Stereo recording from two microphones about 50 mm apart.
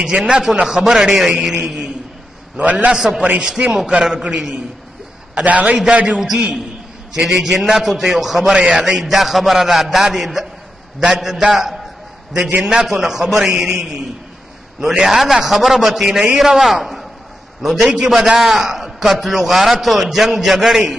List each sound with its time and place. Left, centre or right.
0.0 s a man's voice: centre
2.5 s a man's voice: right
2.9 s a man's voice: centre
3.3 s a man's voice: right
5.3 s a man's voice: right
6.1 s a man's voice: centre
17.9 s a man's voice: centre
18.4 s a man's voice: centre